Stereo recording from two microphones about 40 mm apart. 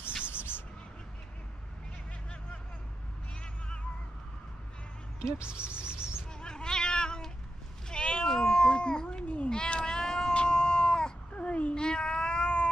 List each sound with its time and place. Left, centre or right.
0.3 s a sound: left
5.4 s insect: right
6.4 s cat: centre
11.3 s cat: left